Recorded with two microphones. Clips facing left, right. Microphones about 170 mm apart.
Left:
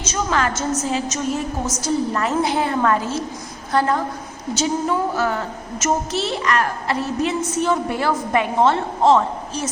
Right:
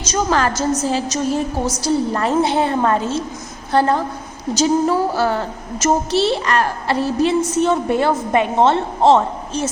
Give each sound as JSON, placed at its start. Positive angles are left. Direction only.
{"t": 0.0, "sound": "a woman's voice", "side_deg": -35}